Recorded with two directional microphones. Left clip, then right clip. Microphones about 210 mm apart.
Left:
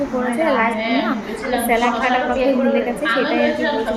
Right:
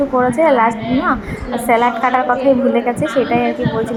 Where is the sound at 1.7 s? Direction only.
10° right (ahead or behind).